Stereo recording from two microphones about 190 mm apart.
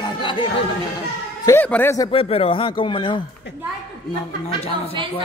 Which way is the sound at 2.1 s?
30° left (ahead or behind).